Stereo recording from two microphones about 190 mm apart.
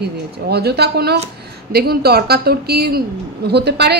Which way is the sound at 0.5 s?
60° right (ahead or behind).